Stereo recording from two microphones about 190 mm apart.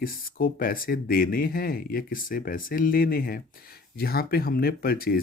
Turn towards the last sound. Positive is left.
turn(degrees=50)  # may be behind; listen again after turning